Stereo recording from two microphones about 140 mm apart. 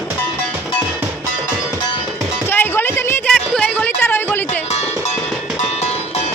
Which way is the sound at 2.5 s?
15° left (ahead or behind).